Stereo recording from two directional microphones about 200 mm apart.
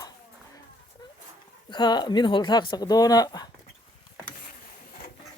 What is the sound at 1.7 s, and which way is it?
Speech, 20° left (ahead or behind).